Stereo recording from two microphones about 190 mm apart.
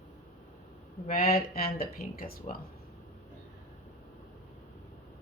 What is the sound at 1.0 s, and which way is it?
Speech, 50° left (ahead or behind).